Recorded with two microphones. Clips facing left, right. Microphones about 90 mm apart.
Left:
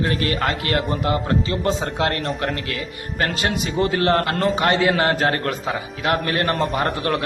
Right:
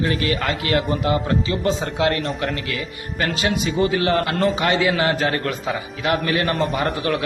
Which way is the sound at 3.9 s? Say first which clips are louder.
Left 1 dB; 50° left (ahead or behind).